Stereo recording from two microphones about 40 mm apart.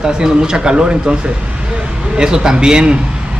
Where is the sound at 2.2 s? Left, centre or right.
Centre.